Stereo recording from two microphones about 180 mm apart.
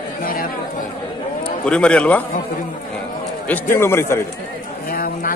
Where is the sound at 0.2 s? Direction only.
55° left (ahead or behind).